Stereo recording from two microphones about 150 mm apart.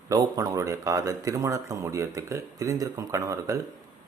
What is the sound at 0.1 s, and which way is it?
Speech, 25° right (ahead or behind).